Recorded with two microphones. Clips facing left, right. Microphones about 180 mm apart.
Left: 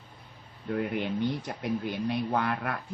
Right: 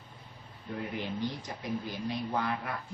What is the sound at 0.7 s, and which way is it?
Speech, 60° left (ahead or behind).